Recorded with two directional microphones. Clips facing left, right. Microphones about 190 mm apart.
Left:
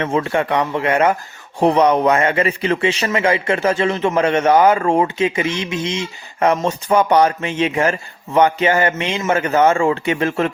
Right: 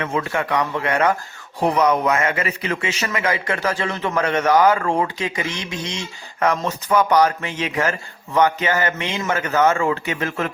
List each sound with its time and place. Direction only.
0.0 s speech: 30° left (ahead or behind)